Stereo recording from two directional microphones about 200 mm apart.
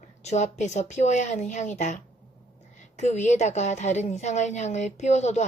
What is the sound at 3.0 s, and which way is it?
Speech, 35° left (ahead or behind).